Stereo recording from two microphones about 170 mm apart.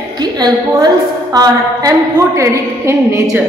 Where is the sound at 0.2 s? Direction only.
25° right (ahead or behind).